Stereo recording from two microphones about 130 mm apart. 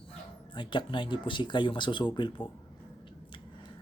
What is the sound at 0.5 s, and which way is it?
Speech, 40° left (ahead or behind).